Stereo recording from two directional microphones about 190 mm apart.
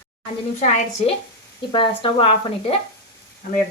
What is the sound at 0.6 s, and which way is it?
Speech, 40° left (ahead or behind).